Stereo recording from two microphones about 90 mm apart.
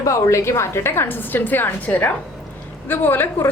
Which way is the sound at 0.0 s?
35° left (ahead or behind).